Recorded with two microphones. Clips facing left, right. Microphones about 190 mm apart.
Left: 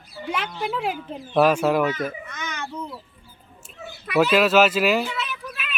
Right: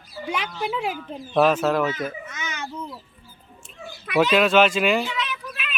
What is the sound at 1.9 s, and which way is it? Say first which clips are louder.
Speech: left 1 dB; 5° right (ahead or behind).